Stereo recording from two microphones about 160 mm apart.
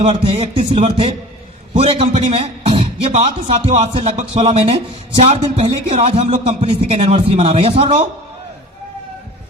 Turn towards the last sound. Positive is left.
turn(degrees=-35)  # may be behind; listen again after turning